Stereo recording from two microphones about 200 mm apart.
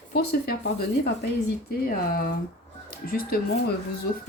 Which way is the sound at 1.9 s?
45° left (ahead or behind).